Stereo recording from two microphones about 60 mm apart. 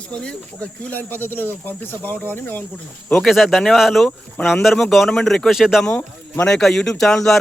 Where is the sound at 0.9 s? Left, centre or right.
Left.